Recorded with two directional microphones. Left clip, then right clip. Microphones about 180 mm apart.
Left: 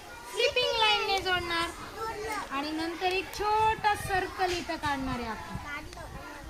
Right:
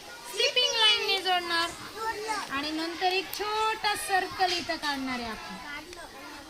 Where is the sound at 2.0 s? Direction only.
25° right (ahead or behind).